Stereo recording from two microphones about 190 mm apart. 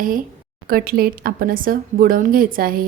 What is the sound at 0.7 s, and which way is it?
Speech, 55° right (ahead or behind).